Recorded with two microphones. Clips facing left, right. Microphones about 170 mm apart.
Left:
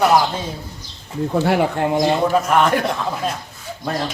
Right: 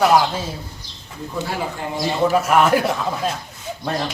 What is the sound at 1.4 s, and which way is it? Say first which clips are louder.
Speech: left 9 dB; 65° left (ahead or behind).